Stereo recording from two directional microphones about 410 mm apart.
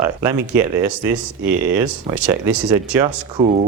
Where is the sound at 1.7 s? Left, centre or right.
Centre.